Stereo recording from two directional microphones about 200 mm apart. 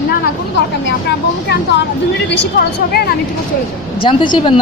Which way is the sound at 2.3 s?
55° left (ahead or behind).